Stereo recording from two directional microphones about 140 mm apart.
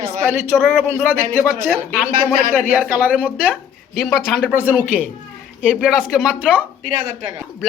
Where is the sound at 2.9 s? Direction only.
10° right (ahead or behind).